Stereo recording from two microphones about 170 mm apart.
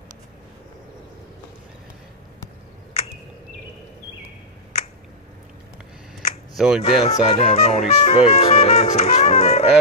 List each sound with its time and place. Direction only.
6.5 s speech: 5° right (ahead or behind)
6.8 s speech: 40° left (ahead or behind)